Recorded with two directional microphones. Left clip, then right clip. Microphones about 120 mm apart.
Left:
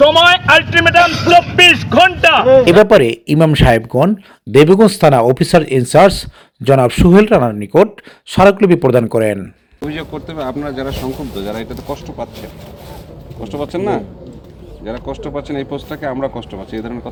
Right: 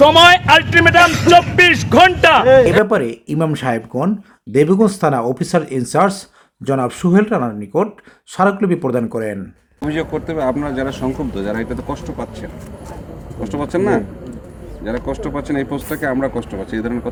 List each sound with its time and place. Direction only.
0.0 s a man's voice: 10° right (ahead or behind)
2.8 s speech: 40° left (ahead or behind)
9.9 s speech: 45° right (ahead or behind)
13.4 s speech: 30° right (ahead or behind)
15.0 s speech: 30° right (ahead or behind)